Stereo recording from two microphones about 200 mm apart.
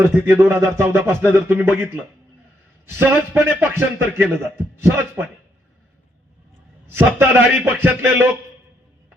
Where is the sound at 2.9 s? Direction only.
10° right (ahead or behind).